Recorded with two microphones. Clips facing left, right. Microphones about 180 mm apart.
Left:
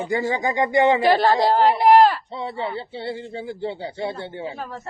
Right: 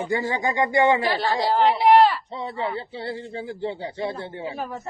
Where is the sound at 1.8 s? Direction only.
45° left (ahead or behind).